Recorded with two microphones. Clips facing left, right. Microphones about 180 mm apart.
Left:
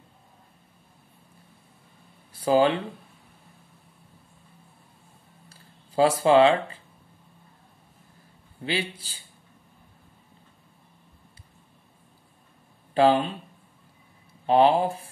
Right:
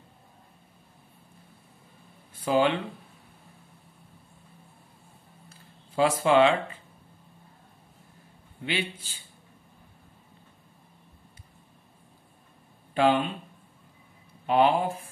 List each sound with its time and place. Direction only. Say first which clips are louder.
2.3 s speech: left 3 dB; 35° left (ahead or behind)
5.9 s speech: left 3 dB; 35° left (ahead or behind)
8.6 s speech: left 2 dB; 35° left (ahead or behind)
12.9 s speech: left 3 dB; 35° left (ahead or behind)
14.4 s speech: left 3 dB; 30° left (ahead or behind)